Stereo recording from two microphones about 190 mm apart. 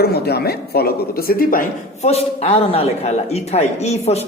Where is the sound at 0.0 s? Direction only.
55° left (ahead or behind).